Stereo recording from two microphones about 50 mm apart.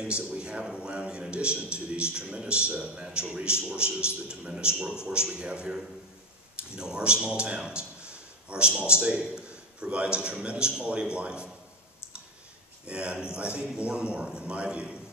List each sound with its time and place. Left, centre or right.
0.0 s a man's voice: centre
12.8 s a man's voice: right